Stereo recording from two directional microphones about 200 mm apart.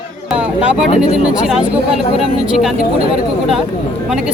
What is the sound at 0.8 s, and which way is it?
Speech, 35° left (ahead or behind).